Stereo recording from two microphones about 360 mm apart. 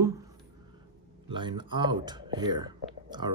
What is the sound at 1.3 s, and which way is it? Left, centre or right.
Speech, centre.